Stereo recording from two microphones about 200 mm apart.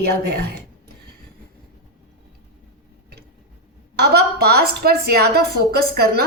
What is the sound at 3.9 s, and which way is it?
A woman's voice, 55° right (ahead or behind).